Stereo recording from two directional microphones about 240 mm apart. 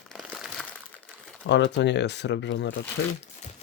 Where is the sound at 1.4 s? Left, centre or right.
Left.